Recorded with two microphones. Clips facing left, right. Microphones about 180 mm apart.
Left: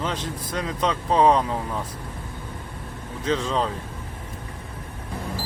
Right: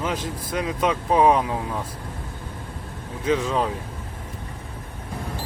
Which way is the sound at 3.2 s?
10° right (ahead or behind).